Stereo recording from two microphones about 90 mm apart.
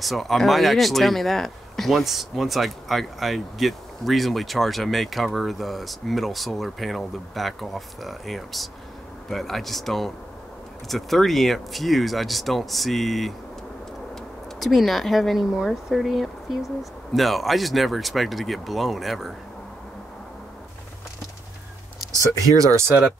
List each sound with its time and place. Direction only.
0.0 s speech: centre (ahead or behind)
14.6 s speech: centre (ahead or behind)
22.1 s speech: 35° right (ahead or behind)